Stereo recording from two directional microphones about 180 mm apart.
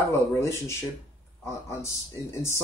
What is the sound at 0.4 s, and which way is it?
Speech, 15° left (ahead or behind).